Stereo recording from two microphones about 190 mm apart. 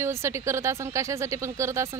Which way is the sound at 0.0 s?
15° right (ahead or behind).